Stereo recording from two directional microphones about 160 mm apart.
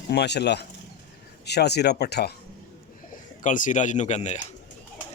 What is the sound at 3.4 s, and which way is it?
Speech, 55° left (ahead or behind).